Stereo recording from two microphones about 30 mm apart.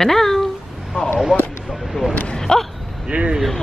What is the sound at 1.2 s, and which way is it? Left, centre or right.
Speech, centre.